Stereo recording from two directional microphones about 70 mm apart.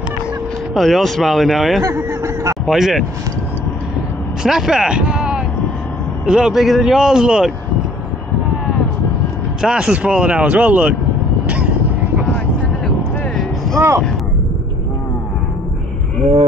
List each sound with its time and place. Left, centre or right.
0.7 s speech: centre
4.4 s speech: centre
9.6 s speech: centre
11.4 s vehicle: centre
12.8 s vehicle: centre
13.7 s speech: right